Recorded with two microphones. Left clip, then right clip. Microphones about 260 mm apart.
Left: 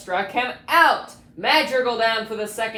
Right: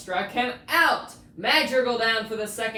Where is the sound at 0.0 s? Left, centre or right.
Left.